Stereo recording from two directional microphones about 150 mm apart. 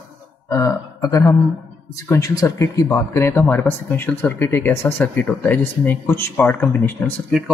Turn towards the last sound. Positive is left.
turn(degrees=10)  # may be behind; listen again after turning